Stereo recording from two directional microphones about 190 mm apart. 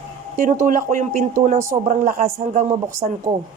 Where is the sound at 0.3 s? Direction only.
45° right (ahead or behind).